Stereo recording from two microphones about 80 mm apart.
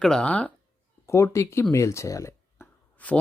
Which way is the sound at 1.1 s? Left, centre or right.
Left.